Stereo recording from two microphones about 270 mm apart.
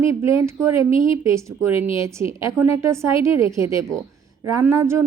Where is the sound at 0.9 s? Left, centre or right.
Centre.